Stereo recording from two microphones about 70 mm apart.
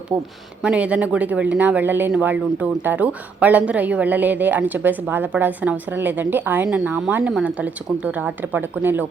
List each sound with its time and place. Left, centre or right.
0.6 s speech: centre